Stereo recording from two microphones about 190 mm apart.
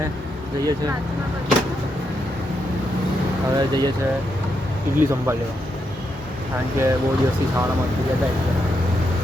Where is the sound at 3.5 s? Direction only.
20° right (ahead or behind).